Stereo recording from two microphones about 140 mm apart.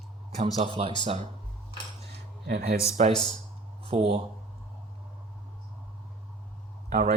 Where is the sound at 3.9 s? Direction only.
40° right (ahead or behind).